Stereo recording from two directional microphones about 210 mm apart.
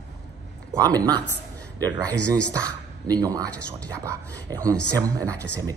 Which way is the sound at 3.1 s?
20° right (ahead or behind).